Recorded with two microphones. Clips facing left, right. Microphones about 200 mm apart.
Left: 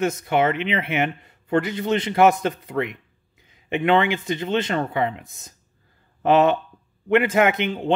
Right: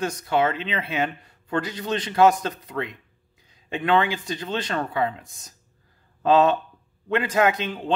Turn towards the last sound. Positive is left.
turn(degrees=25)  # may be behind; listen again after turning